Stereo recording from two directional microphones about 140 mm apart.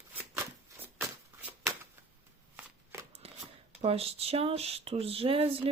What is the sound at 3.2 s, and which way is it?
Shuffling cards, 45° right (ahead or behind).